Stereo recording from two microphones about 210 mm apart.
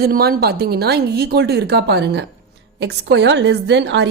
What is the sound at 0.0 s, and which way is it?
A woman's voice, 45° right (ahead or behind).